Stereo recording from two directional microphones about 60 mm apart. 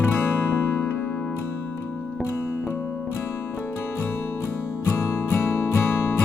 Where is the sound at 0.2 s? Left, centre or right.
Left.